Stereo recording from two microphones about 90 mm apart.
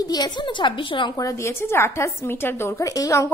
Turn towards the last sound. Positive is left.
turn(degrees=40)  # may be behind; listen again after turning